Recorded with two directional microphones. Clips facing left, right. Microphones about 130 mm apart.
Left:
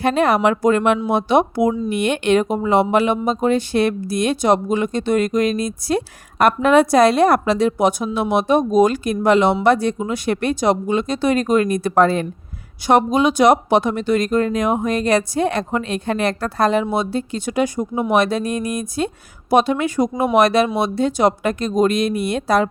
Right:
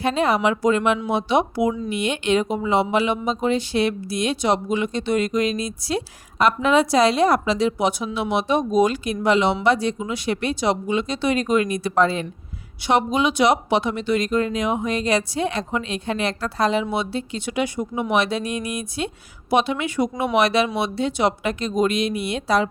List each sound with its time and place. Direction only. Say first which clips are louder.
0.0 s speech: left 4 dB; 55° left (ahead or behind)